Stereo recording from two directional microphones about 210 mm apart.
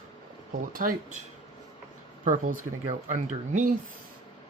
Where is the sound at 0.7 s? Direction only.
40° right (ahead or behind).